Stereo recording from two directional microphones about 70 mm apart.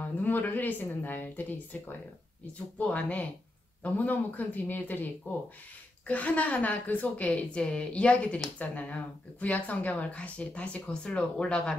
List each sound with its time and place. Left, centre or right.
0.2 s a woman's voice: left